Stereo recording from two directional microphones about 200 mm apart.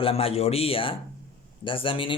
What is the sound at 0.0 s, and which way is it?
Speech, 30° left (ahead or behind).